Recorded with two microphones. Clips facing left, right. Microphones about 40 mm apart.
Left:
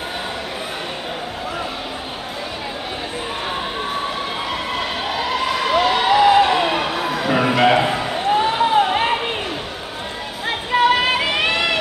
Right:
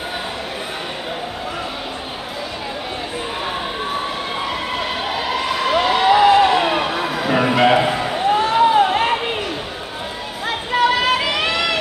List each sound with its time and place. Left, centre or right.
4.5 s emergency vehicle: centre
8.5 s a sound: centre
10.8 s run: left